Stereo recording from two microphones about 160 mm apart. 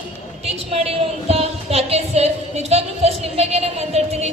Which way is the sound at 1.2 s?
40° right (ahead or behind).